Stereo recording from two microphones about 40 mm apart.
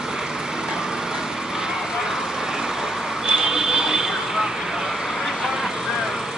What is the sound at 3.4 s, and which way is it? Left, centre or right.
Vehicle, centre.